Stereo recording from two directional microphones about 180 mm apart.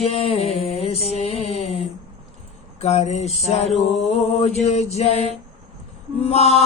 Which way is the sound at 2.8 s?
35° left (ahead or behind).